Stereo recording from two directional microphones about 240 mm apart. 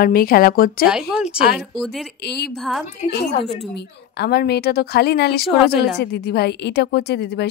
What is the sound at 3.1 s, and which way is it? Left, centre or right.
A woman's voice, left.